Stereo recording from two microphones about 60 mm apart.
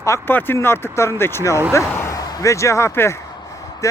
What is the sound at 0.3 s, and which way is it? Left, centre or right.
Speech, left.